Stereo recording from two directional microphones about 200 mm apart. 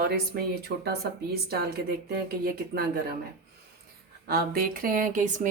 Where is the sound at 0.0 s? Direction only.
50° right (ahead or behind).